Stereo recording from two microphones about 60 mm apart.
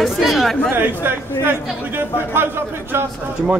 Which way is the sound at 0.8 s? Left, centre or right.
Right.